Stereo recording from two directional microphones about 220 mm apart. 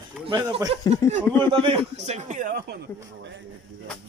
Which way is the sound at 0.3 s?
20° right (ahead or behind).